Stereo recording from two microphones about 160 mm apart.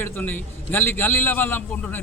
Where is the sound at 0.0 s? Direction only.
10° left (ahead or behind).